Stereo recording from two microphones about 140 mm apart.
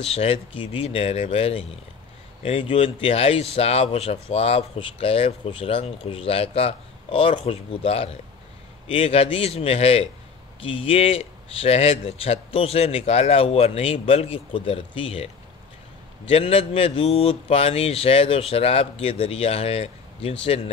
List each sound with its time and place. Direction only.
0.0 s speech: 45° left (ahead or behind)